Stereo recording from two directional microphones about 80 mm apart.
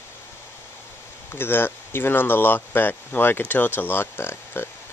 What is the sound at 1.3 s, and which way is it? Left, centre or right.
Speech, left.